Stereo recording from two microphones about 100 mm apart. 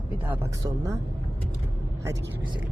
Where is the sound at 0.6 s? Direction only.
35° right (ahead or behind).